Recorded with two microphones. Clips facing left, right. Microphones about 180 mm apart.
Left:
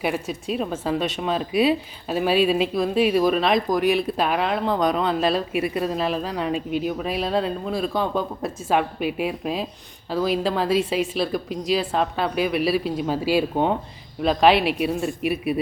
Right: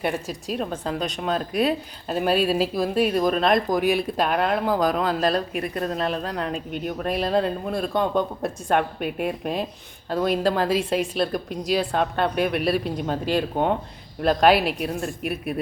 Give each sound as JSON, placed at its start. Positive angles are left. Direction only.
{"t": 0.0, "sound": "speech", "side_deg": 0}